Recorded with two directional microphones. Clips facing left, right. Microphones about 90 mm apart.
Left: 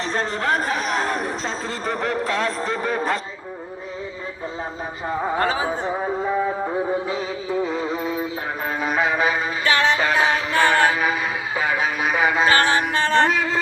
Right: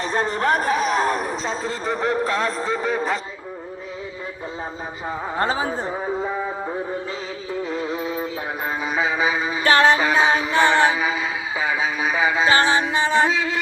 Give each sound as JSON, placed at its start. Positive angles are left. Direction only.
{"t": 0.1, "sound": "a man's voice", "side_deg": -15}
{"t": 0.8, "sound": "a sound", "side_deg": -5}
{"t": 2.0, "sound": "a man's voice", "side_deg": -35}
{"t": 2.6, "sound": "a man's voice", "side_deg": -5}
{"t": 5.4, "sound": "a man's voice", "side_deg": -30}
{"t": 5.8, "sound": "a man's voice", "side_deg": 5}
{"t": 6.7, "sound": "music", "side_deg": 10}
{"t": 7.8, "sound": "synthetic singing", "side_deg": 0}
{"t": 8.8, "sound": "a sound", "side_deg": 0}
{"t": 9.6, "sound": "a man's voice", "side_deg": -35}
{"t": 10.0, "sound": "music", "side_deg": -15}
{"t": 12.5, "sound": "music", "side_deg": -20}